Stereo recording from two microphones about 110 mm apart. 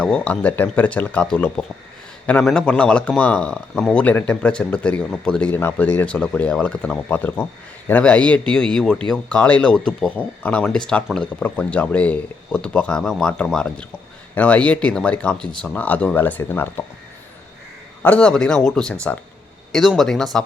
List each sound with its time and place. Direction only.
0.0 s speech: 10° left (ahead or behind)
18.0 s speech: 10° left (ahead or behind)